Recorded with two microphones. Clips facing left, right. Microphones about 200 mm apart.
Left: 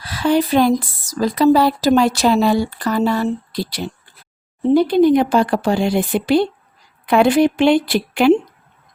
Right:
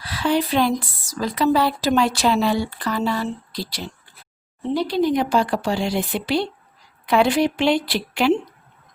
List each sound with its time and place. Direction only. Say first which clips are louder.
0.0 s a woman's voice: left 4 dB; 45° left (ahead or behind)